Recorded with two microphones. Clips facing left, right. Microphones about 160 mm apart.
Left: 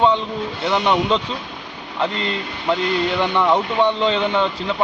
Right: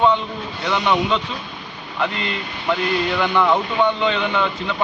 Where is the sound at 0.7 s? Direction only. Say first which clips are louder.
Left 1 dB; 30° left (ahead or behind).